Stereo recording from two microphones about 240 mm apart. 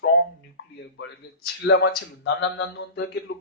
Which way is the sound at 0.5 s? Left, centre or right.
Left.